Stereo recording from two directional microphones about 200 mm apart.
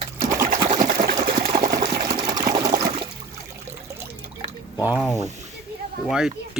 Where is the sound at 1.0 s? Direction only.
45° right (ahead or behind).